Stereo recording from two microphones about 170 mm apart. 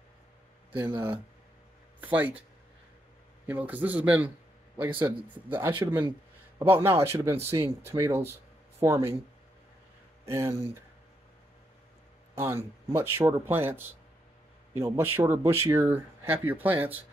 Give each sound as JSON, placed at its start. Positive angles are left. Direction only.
{"t": 0.7, "sound": "speech", "side_deg": -25}
{"t": 2.0, "sound": "speech", "side_deg": -10}
{"t": 3.4, "sound": "speech", "side_deg": -10}
{"t": 10.2, "sound": "speech", "side_deg": -15}
{"t": 12.4, "sound": "speech", "side_deg": -15}